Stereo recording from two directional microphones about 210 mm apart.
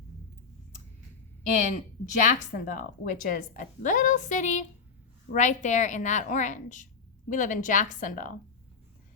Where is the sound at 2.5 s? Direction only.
40° left (ahead or behind).